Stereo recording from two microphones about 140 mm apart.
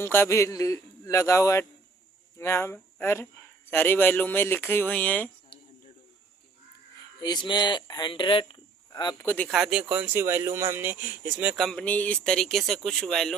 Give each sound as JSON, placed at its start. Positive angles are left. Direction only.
{"t": 0.0, "sound": "a man's voice", "side_deg": 15}
{"t": 7.2, "sound": "speech", "side_deg": 30}
{"t": 9.1, "sound": "speech", "side_deg": 15}
{"t": 9.5, "sound": "speech", "side_deg": -5}
{"t": 11.5, "sound": "speech", "side_deg": 0}